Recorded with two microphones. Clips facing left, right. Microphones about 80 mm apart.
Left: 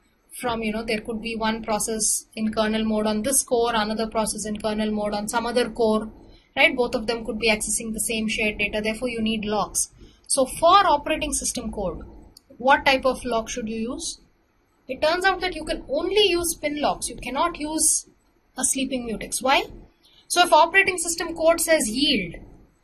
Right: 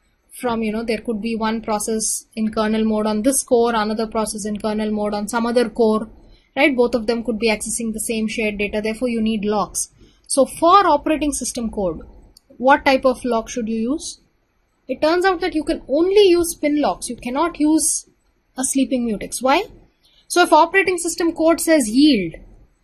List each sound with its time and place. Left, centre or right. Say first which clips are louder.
0.4 s a woman's voice: right 5 dB; right